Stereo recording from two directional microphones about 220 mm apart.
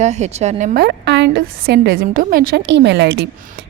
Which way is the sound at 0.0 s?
30° right (ahead or behind).